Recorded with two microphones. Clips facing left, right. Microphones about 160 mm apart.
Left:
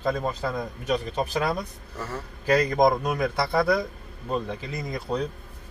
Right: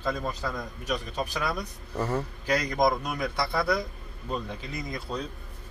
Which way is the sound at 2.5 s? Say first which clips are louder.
Left 5 dB; 55° left (ahead or behind).